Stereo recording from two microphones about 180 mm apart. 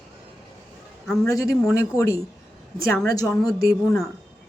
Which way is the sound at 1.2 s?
15° left (ahead or behind).